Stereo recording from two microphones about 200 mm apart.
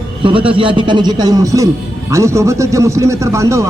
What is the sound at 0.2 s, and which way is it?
A man's voice, 25° right (ahead or behind).